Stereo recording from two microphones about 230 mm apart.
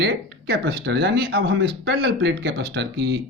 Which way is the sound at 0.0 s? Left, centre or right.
Right.